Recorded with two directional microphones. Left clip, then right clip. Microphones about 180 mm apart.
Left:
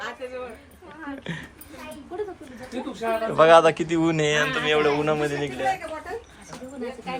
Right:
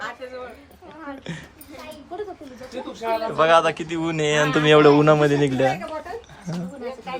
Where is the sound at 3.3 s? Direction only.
10° right (ahead or behind).